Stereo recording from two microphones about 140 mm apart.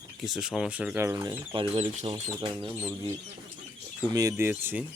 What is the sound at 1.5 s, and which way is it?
Speech, 45° right (ahead or behind).